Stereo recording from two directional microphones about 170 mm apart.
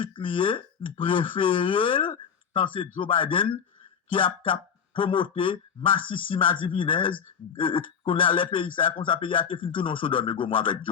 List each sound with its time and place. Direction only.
0.0 s speech: 30° left (ahead or behind)